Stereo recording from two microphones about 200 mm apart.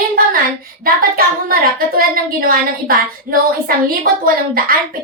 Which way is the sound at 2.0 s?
45° right (ahead or behind).